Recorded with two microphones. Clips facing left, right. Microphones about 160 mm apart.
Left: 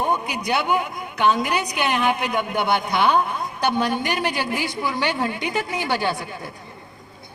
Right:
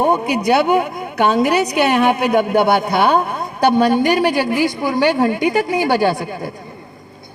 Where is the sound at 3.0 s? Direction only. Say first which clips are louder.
Right 4 dB; 45° right (ahead or behind).